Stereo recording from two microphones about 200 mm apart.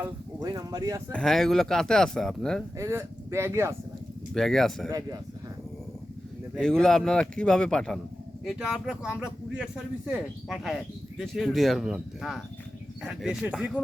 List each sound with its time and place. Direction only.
0.4 s speech: 20° right (ahead or behind)
1.1 s speech: centre (ahead or behind)
2.7 s speech: 15° right (ahead or behind)
4.4 s speech: centre (ahead or behind)
4.9 s speech: 15° right (ahead or behind)
6.6 s speech: 5° left (ahead or behind)